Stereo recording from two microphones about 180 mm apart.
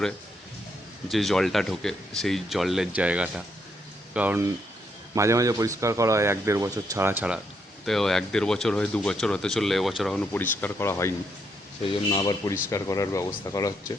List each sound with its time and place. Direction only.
1.0 s speech: centre (ahead or behind)
7.9 s speech: centre (ahead or behind)
12.1 s speech: 20° left (ahead or behind)